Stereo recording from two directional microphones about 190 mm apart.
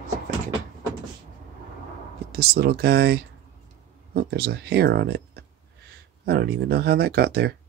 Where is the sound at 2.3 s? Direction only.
55° right (ahead or behind).